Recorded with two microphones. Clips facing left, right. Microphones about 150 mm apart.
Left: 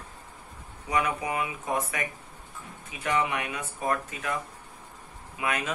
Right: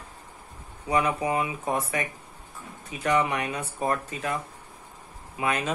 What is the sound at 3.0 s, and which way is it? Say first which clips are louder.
Speech: right 3 dB; 35° right (ahead or behind).